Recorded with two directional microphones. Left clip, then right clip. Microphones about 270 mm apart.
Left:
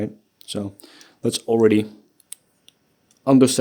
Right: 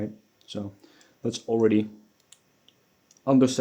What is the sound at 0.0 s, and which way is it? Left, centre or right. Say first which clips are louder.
Speech: left 6 dB; left.